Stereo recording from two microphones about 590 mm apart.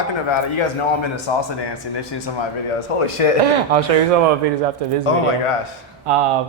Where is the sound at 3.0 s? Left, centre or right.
Left.